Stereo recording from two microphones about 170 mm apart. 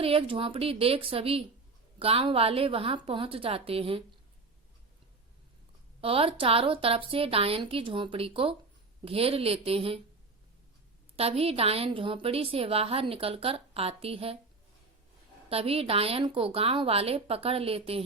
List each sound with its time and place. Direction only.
0.0 s a woman's voice: 30° right (ahead or behind)
6.0 s a woman's voice: 35° right (ahead or behind)
11.2 s a woman's voice: 35° right (ahead or behind)
15.4 s a woman's voice: 35° right (ahead or behind)